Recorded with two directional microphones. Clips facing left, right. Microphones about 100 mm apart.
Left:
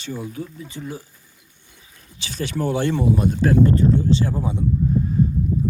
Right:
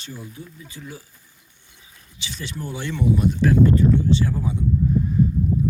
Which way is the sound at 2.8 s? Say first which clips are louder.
Right 1 dB; 40° left (ahead or behind).